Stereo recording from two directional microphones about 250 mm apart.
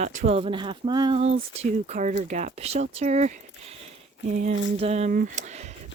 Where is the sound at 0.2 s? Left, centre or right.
Right.